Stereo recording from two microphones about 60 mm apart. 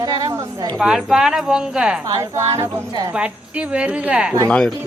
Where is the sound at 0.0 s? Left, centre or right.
Right.